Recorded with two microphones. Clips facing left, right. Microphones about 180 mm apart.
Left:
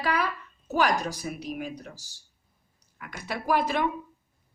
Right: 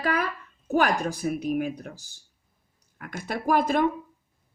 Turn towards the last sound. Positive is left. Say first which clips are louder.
# right 3 dB
turn(degrees=-50)  # may be behind; listen again after turning